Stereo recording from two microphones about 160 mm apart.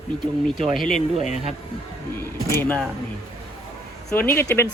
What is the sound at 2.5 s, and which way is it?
Speech, 15° left (ahead or behind).